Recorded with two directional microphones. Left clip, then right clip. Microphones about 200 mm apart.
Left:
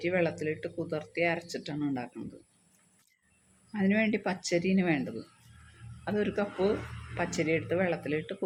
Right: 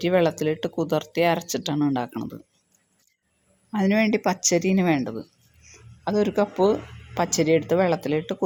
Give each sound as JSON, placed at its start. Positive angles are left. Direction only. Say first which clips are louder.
{"t": 0.0, "sound": "speech", "louder": "right 9 dB", "side_deg": -35}
{"t": 3.7, "sound": "speech", "louder": "right 7 dB", "side_deg": -35}